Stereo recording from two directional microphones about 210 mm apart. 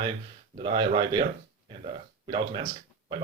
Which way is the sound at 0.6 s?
20° right (ahead or behind).